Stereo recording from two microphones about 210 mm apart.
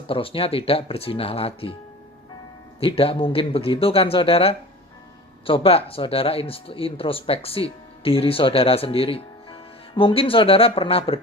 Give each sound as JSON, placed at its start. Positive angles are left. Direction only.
{"t": 0.1, "sound": "speech", "side_deg": 25}
{"t": 2.8, "sound": "speech", "side_deg": 25}